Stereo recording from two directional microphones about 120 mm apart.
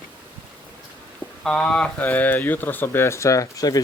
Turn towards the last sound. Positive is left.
turn(degrees=30)  # may be behind; listen again after turning